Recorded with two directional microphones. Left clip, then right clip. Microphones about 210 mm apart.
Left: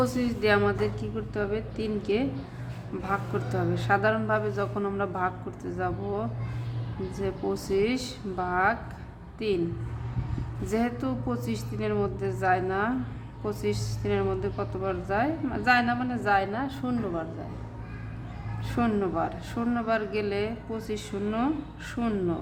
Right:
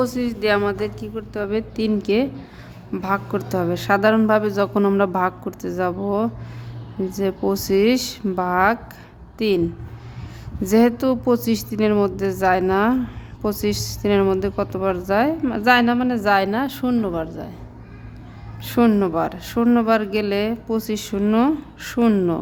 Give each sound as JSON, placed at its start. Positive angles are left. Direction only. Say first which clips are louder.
{"t": 0.0, "sound": "a woman's voice", "louder": "right 5 dB", "side_deg": -50}
{"t": 10.7, "sound": "a woman's voice", "louder": "right 12 dB", "side_deg": -55}
{"t": 18.6, "sound": "speech", "louder": "right 10 dB", "side_deg": -55}